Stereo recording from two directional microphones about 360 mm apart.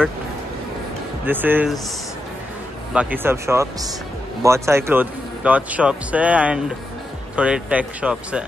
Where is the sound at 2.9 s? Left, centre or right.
Centre.